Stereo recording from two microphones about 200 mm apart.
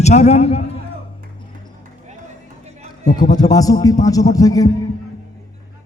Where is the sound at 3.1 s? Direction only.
20° left (ahead or behind).